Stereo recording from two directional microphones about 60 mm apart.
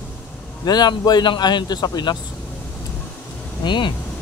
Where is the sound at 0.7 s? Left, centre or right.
Left.